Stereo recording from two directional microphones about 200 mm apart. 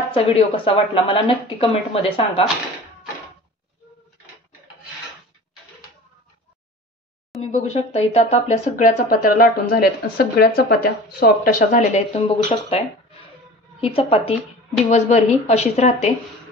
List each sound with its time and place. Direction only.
0.1 s a woman's voice: 25° left (ahead or behind)
7.3 s a sound: centre (ahead or behind)
7.7 s speech: 30° left (ahead or behind); by 11.8 s 50° left (ahead or behind)
11.9 s a woman's voice: 30° left (ahead or behind)